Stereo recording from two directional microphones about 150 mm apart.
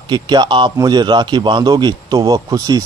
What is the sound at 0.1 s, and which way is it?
A man's voice, 30° right (ahead or behind).